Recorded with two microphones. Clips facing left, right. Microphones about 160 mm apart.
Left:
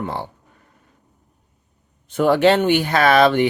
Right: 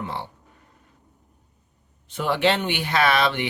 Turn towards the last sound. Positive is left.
turn(degrees=45)  # may be behind; listen again after turning